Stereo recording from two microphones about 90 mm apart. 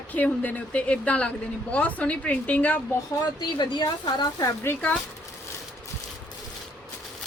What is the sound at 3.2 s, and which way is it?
Speech, 55° left (ahead or behind).